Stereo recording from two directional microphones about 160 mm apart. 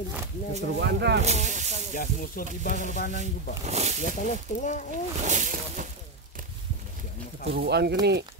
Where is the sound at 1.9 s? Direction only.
55° left (ahead or behind).